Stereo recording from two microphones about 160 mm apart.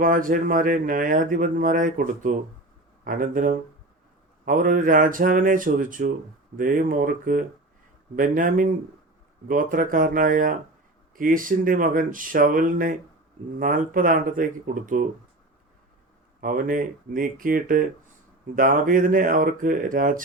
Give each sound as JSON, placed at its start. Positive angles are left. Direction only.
{"t": 0.0, "sound": "speech", "side_deg": -60}
{"t": 16.4, "sound": "speech", "side_deg": -60}